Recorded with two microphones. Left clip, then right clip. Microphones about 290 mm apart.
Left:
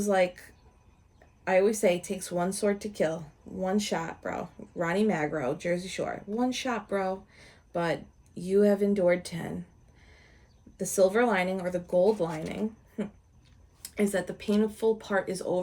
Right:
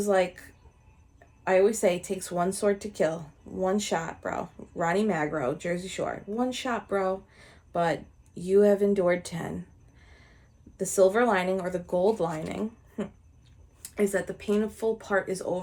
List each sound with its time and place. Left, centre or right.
0.1 s speech: centre
1.5 s speech: centre
11.1 s speech: centre
11.6 s speech: right
12.1 s speech: centre